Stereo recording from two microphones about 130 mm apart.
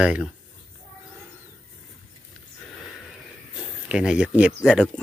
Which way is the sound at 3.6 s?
5° right (ahead or behind).